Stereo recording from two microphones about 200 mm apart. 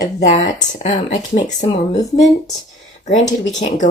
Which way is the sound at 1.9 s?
15° left (ahead or behind).